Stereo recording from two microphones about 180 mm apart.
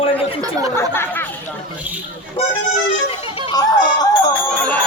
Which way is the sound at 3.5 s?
20° left (ahead or behind).